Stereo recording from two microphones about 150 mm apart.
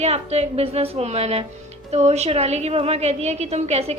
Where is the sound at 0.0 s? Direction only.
45° right (ahead or behind).